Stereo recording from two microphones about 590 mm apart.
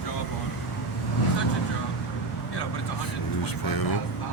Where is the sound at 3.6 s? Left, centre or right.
Left.